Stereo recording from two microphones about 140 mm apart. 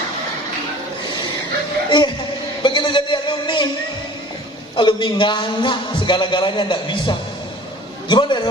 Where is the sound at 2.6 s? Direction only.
35° left (ahead or behind).